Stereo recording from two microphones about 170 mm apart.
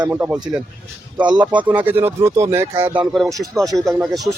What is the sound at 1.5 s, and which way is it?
Speech, 10° right (ahead or behind).